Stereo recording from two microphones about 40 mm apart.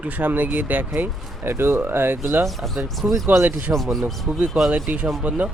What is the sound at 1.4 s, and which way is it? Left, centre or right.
Speech, right.